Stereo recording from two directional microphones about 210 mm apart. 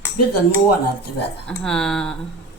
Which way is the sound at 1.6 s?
5° left (ahead or behind).